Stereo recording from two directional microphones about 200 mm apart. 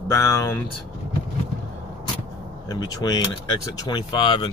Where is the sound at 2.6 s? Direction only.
20° left (ahead or behind).